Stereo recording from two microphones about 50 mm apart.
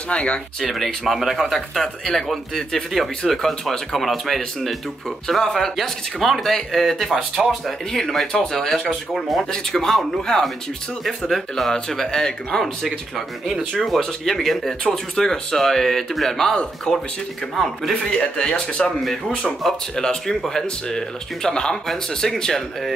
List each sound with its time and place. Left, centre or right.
0.1 s speech: left
0.6 s speech: centre
9.1 s speech: centre
18.0 s speech: centre
18.9 s speech: centre